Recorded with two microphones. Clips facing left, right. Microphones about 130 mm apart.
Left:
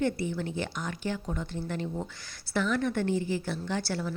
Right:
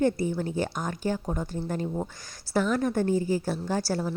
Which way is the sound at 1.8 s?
25° right (ahead or behind).